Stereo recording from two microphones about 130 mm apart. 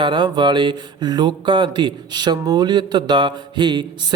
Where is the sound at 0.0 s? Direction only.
35° right (ahead or behind).